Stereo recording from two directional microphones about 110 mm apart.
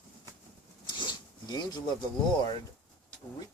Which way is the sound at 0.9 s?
40° left (ahead or behind).